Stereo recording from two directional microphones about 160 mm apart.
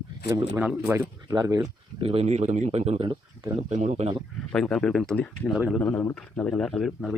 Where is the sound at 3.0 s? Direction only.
30° right (ahead or behind).